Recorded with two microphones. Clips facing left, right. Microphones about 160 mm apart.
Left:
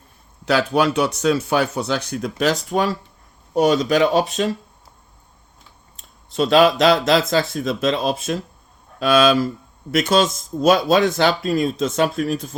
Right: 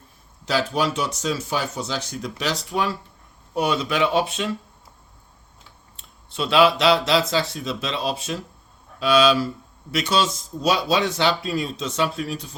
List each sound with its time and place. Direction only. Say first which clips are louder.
0.4 s speech: left 5 dB; 65° left (ahead or behind); by 4.5 s 40° left (ahead or behind)
6.0 s speech: left 7 dB; 40° left (ahead or behind)